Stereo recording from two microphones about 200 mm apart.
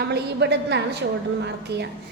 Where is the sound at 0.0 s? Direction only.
55° right (ahead or behind).